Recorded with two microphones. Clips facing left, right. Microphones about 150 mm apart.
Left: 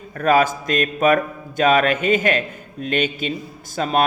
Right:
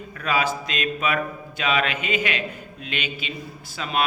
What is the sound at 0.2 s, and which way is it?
Speech, 45° left (ahead or behind).